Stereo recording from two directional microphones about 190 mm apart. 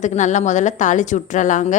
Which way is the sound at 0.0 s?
40° left (ahead or behind).